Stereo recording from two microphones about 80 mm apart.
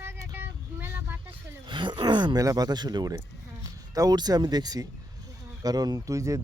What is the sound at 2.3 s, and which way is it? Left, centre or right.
Speech, right.